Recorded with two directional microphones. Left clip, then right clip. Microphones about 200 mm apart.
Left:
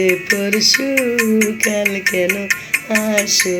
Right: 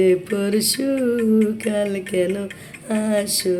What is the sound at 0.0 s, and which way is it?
Music, 15° right (ahead or behind).